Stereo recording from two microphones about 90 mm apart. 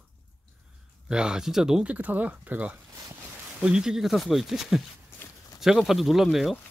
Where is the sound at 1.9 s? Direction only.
20° right (ahead or behind).